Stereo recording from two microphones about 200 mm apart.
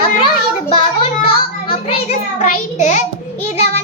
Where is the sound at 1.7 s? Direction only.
35° left (ahead or behind).